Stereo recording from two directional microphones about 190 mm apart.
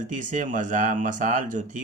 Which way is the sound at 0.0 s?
40° right (ahead or behind).